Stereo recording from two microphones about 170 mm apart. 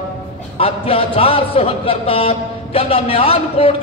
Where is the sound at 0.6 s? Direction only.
35° left (ahead or behind).